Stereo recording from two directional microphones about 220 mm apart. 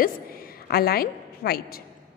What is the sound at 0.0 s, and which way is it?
A woman's voice, 40° left (ahead or behind).